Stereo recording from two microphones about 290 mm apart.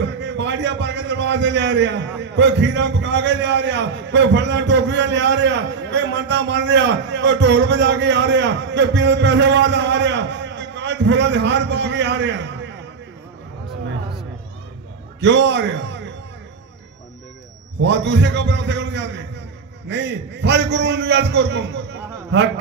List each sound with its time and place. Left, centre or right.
0.0 s a man's voice: right
15.1 s a man's voice: right
17.7 s a man's voice: right